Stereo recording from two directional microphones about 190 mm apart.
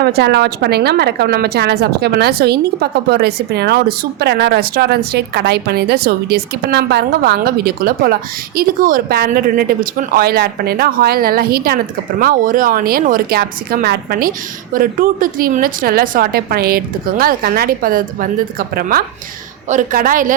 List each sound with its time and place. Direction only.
0.0 s a woman's voice: 60° right (ahead or behind)